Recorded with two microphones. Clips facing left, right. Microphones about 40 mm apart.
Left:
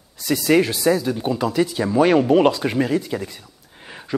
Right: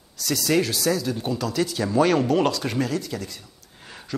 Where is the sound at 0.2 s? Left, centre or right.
Left.